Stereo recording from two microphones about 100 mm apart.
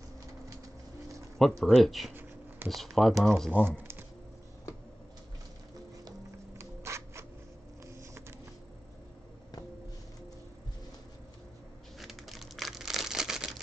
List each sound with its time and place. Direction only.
1.6 s speech: centre (ahead or behind)
3.5 s speech: 20° right (ahead or behind)
6.6 s a sound: 30° right (ahead or behind)
12.0 s typewriter: centre (ahead or behind)